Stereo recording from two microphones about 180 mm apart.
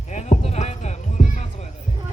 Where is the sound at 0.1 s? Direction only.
40° left (ahead or behind).